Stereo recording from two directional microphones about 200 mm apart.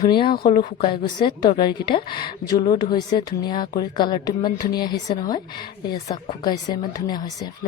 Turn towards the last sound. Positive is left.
turn(degrees=20)  # may be behind; listen again after turning